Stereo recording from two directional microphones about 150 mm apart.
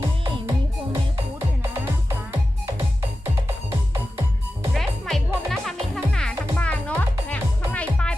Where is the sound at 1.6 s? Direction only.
15° right (ahead or behind).